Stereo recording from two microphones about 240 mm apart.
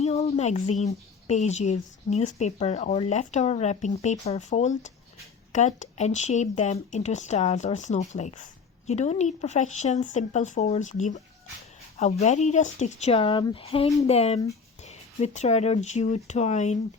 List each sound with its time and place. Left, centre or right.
0.0 s speech: left
12.2 s speech: left